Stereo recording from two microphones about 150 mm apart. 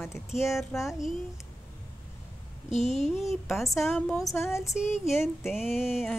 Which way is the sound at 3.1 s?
Centre (ahead or behind).